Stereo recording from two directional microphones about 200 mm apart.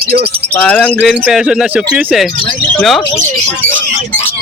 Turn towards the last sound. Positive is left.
turn(degrees=0)  # may be behind; listen again after turning